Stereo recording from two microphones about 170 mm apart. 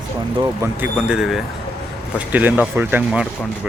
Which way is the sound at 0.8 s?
5° right (ahead or behind).